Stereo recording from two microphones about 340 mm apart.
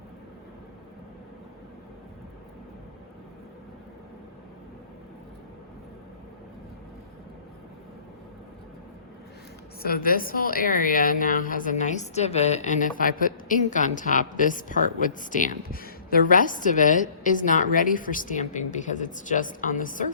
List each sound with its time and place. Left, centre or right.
9.8 s a woman's voice: left